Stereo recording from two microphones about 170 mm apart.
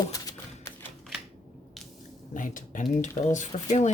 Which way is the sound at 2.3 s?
50° left (ahead or behind).